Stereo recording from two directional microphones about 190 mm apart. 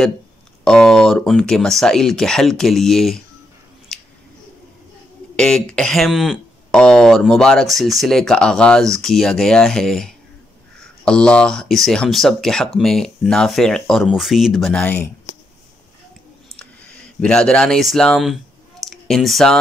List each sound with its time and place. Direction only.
0.7 s speech: 5° left (ahead or behind)
3.9 s a sound: 5° left (ahead or behind)
5.3 s speech: 5° left (ahead or behind)
17.2 s speech: 5° left (ahead or behind)